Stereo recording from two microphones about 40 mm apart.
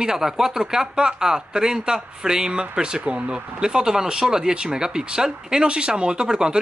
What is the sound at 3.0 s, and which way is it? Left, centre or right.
Speech, right.